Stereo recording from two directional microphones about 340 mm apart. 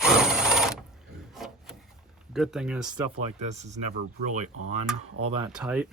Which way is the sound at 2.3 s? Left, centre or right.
Centre.